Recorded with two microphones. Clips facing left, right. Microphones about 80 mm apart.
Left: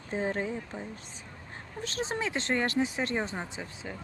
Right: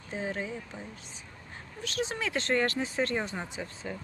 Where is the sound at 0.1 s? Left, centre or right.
Left.